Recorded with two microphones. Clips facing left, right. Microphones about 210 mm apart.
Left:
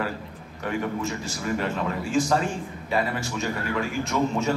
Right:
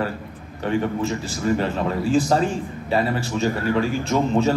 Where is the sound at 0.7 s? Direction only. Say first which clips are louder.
Right 5 dB; 30° right (ahead or behind).